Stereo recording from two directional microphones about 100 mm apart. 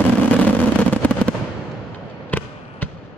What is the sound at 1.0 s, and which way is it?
Fireworks, 15° left (ahead or behind).